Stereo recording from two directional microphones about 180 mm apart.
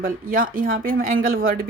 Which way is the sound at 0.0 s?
50° right (ahead or behind).